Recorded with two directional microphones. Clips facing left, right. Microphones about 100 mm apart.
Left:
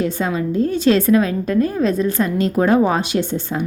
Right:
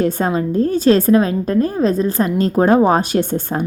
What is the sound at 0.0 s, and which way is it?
A woman's voice, 45° right (ahead or behind).